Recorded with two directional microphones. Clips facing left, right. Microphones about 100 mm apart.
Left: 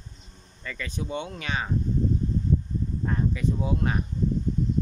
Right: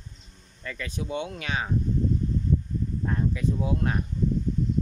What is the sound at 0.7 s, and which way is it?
Speech, 5° right (ahead or behind).